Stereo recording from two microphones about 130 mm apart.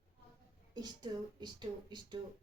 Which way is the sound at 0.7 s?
35° right (ahead or behind).